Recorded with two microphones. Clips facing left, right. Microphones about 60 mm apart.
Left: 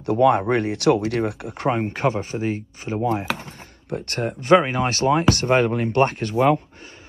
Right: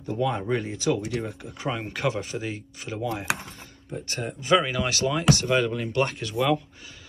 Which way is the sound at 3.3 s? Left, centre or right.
Left.